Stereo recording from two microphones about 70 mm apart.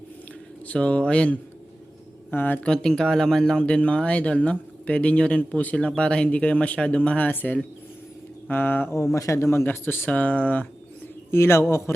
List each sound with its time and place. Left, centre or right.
0.7 s speech: centre
2.3 s speech: left
2.6 s speech: centre; by 8.9 s left
9.1 s a man's voice: left
11.3 s speech: left